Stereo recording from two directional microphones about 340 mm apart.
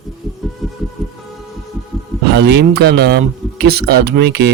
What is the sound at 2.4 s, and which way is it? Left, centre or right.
Speech, right.